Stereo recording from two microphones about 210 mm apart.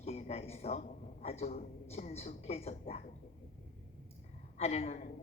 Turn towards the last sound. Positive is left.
turn(degrees=30)  # may be behind; listen again after turning